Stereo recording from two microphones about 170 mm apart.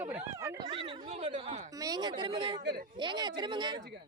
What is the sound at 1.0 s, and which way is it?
Speech, 45° right (ahead or behind).